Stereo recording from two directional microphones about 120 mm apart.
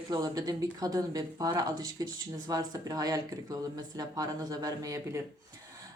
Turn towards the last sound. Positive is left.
turn(degrees=-25)  # may be behind; listen again after turning